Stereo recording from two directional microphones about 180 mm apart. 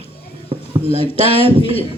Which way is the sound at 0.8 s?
30° left (ahead or behind).